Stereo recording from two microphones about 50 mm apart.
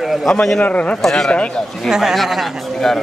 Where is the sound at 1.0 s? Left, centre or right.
Centre.